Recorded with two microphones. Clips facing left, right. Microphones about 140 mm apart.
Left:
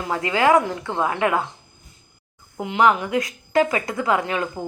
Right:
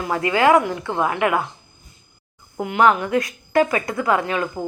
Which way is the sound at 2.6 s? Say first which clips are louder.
Right 1 dB; 15° left (ahead or behind).